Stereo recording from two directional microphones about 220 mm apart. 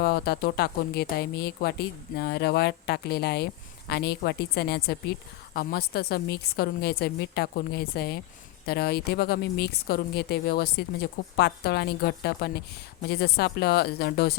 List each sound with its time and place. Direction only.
0.0 s speech: 45° left (ahead or behind)